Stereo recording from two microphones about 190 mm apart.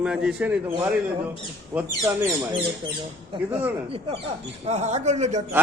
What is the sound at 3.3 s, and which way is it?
Speech, 25° right (ahead or behind).